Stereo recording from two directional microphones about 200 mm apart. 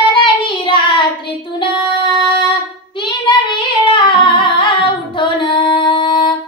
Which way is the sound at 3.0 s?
25° left (ahead or behind).